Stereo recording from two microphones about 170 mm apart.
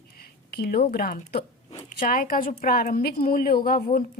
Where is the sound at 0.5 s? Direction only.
65° left (ahead or behind).